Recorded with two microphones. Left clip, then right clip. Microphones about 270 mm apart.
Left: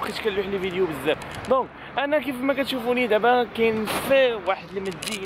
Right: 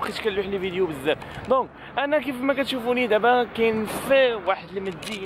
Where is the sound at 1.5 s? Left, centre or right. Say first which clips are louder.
Even; right.